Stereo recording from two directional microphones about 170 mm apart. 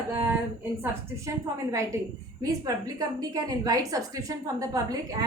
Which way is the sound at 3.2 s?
20° right (ahead or behind).